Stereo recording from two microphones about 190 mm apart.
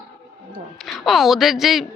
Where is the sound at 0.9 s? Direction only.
Centre (ahead or behind).